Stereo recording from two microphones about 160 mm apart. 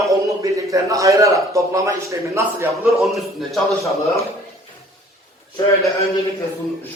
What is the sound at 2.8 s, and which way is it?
Speech, centre (ahead or behind).